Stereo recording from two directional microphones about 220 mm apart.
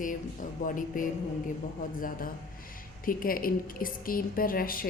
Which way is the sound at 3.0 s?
40° left (ahead or behind).